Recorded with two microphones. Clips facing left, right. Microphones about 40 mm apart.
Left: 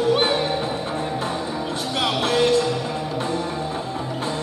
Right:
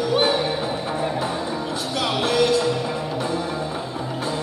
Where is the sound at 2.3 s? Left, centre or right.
Left.